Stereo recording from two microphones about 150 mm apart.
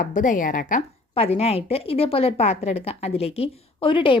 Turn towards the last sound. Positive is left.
turn(degrees=35)  # may be behind; listen again after turning